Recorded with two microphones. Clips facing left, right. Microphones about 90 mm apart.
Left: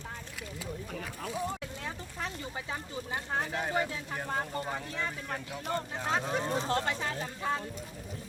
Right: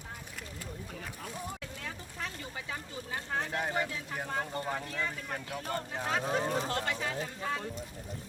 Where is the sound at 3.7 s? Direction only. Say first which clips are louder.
Left 2 dB; 20° left (ahead or behind).